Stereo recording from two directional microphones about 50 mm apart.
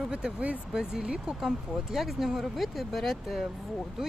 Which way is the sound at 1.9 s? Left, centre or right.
Centre.